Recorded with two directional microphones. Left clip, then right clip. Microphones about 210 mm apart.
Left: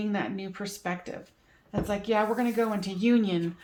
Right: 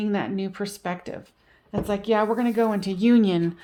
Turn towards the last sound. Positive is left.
turn(degrees=-50)  # may be behind; listen again after turning